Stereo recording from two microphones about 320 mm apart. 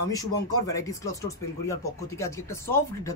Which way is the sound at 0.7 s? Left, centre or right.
Centre.